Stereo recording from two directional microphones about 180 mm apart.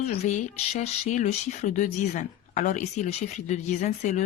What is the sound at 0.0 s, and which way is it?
Speech, 35° left (ahead or behind).